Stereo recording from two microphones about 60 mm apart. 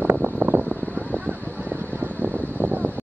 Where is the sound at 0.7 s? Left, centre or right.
Centre.